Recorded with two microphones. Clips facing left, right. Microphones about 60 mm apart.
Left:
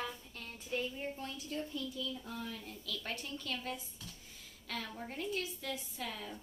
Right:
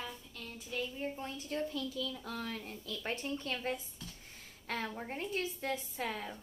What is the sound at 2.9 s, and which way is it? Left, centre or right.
Speech, right.